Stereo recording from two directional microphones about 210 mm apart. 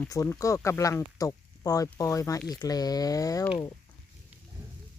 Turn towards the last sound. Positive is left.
turn(degrees=15)  # may be behind; listen again after turning